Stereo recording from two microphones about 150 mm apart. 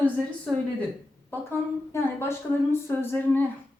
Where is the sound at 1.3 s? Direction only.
15° left (ahead or behind).